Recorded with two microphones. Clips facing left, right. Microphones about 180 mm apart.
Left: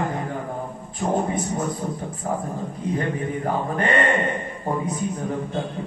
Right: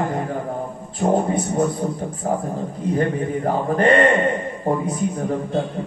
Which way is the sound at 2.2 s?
45° right (ahead or behind).